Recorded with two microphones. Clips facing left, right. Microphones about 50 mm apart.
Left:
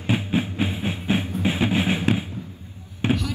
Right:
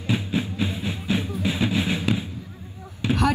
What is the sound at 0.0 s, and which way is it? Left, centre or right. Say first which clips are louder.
Music: left 2 dB; left.